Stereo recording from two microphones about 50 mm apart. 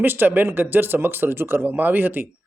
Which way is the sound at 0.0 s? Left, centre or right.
Right.